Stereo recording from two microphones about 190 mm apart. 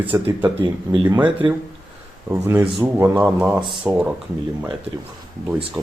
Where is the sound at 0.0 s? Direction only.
10° right (ahead or behind).